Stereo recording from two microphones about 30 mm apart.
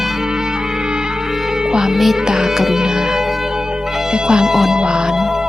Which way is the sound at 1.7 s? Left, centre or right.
Right.